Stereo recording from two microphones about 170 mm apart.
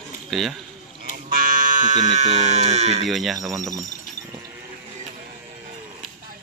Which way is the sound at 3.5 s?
20° right (ahead or behind).